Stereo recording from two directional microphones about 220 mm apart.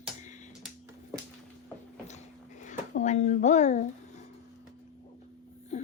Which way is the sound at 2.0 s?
30° left (ahead or behind).